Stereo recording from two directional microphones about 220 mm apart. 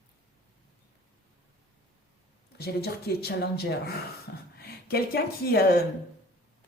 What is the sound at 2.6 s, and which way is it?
A woman's voice, 45° left (ahead or behind).